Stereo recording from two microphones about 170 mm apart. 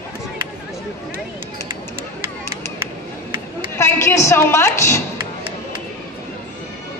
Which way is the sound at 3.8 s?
15° left (ahead or behind).